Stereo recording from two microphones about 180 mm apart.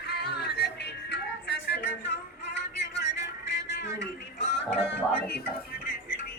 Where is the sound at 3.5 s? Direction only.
75° left (ahead or behind).